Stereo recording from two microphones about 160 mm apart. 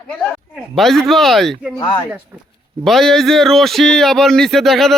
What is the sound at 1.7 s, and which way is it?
Speech, 25° left (ahead or behind).